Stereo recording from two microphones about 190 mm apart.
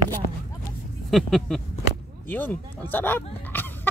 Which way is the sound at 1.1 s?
Centre (ahead or behind).